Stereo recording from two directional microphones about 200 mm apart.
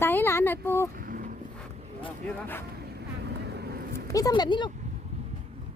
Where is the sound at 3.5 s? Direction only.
55° right (ahead or behind).